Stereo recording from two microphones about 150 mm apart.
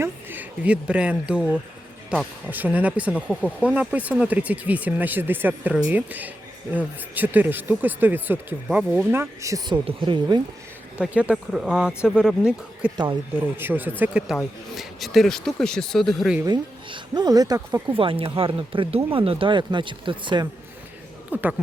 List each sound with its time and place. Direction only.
0.0 s speech: 15° right (ahead or behind)
9.7 s speech: 30° right (ahead or behind)
10.9 s speech: 10° right (ahead or behind)
16.4 s speech: 30° right (ahead or behind)
17.9 s speech: 35° right (ahead or behind)
21.3 s speech: 10° right (ahead or behind)